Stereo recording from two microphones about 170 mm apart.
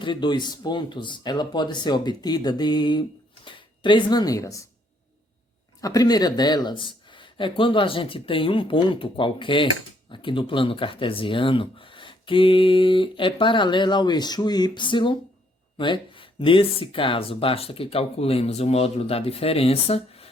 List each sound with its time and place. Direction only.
0.0 s speech: 25° left (ahead or behind)
5.8 s speech: 20° left (ahead or behind)